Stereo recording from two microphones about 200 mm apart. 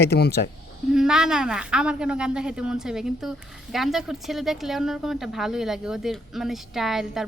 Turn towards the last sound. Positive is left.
turn(degrees=0)  # may be behind; listen again after turning